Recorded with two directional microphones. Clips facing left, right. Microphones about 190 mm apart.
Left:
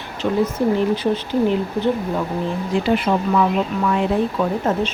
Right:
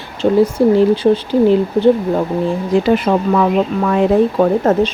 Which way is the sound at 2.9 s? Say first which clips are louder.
Right 1 dB; 55° right (ahead or behind).